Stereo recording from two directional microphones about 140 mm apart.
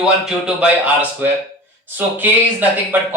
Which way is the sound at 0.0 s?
5° right (ahead or behind).